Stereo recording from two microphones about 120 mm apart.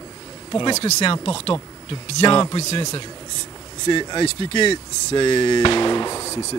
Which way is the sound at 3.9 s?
45° left (ahead or behind).